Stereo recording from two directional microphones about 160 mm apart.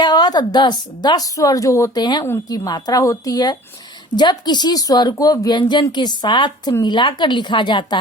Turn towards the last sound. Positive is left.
turn(degrees=30)  # may be behind; listen again after turning